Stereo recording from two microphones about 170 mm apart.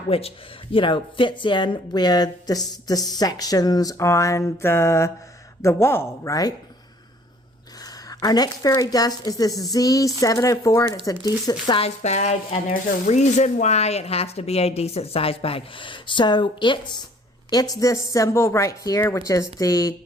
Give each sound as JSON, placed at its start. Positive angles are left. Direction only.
{"t": 0.1, "sound": "speech", "side_deg": 35}
{"t": 8.1, "sound": "speech", "side_deg": 20}
{"t": 9.5, "sound": "speech", "side_deg": 0}
{"t": 9.7, "sound": "speech", "side_deg": 20}
{"t": 11.7, "sound": "speech", "side_deg": 40}